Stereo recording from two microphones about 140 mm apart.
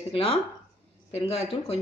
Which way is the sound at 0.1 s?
45° left (ahead or behind).